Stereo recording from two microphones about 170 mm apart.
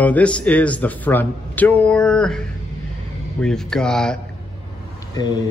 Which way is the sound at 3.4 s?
5° left (ahead or behind).